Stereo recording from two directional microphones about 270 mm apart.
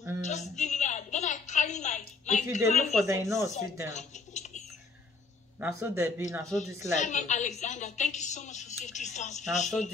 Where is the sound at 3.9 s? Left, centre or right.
Left.